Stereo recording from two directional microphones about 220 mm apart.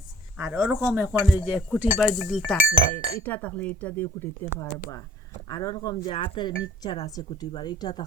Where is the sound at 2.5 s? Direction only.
40° left (ahead or behind).